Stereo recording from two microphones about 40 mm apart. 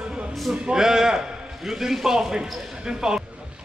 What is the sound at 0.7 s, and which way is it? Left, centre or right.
A man's voice, centre.